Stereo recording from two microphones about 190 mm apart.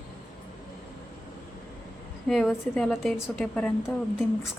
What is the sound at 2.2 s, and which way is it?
A woman's voice, 5° left (ahead or behind).